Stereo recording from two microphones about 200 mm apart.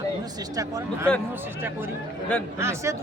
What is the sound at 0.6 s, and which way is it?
Speech, 15° right (ahead or behind).